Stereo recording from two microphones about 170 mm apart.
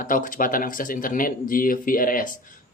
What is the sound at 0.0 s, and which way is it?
Speech, 50° left (ahead or behind).